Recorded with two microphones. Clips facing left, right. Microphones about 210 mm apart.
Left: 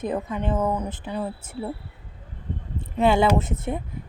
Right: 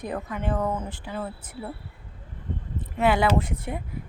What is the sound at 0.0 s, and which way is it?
Speech, 20° left (ahead or behind).